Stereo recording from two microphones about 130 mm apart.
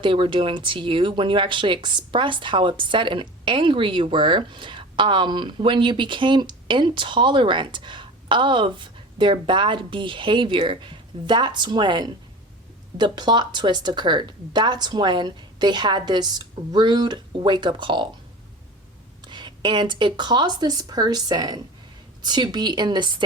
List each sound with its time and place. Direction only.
0.0 s speech: 40° right (ahead or behind)
19.2 s speech: 35° right (ahead or behind)